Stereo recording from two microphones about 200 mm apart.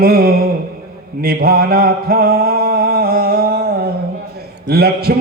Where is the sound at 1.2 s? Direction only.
50° right (ahead or behind).